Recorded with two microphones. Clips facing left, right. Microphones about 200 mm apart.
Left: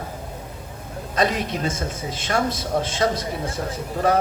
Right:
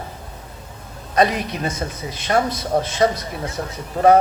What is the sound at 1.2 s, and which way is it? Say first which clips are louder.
Speech: right 3 dB; 55° right (ahead or behind).